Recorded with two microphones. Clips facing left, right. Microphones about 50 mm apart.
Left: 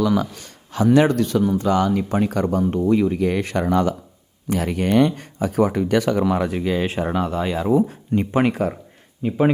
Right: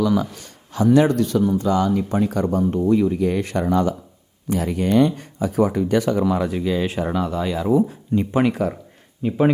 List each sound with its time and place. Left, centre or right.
0.0 s speech: left
9.2 s speech: centre